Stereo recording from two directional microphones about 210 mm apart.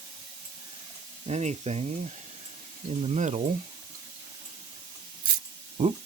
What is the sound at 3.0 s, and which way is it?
Sizzle, 30° right (ahead or behind).